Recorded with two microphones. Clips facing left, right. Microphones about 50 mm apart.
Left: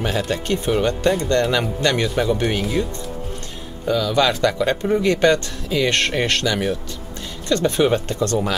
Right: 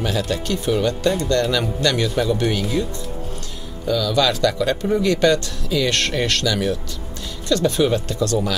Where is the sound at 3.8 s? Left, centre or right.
Centre.